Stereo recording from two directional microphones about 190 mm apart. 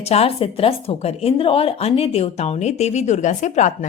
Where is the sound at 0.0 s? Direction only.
30° left (ahead or behind).